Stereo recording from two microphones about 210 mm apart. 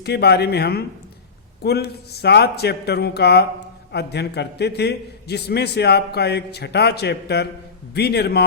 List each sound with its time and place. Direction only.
0.0 s a man's voice: 50° left (ahead or behind)